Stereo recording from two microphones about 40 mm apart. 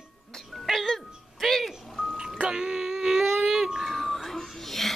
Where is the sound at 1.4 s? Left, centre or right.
Centre.